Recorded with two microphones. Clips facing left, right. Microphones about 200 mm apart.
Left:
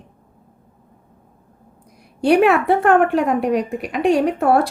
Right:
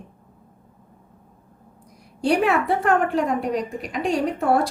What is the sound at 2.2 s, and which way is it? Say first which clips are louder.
A woman's voice: left 6 dB; 65° left (ahead or behind).